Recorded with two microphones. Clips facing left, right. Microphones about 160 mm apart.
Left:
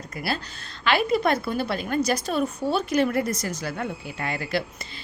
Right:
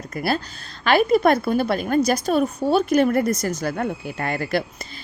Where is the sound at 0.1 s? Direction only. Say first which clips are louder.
Right 6 dB; 50° right (ahead or behind).